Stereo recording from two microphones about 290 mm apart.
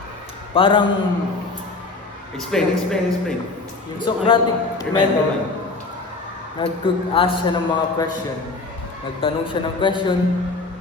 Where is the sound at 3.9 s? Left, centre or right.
Centre.